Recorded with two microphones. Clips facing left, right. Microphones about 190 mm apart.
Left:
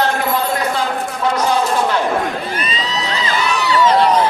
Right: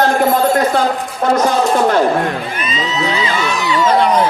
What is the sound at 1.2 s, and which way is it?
Speech, 50° right (ahead or behind).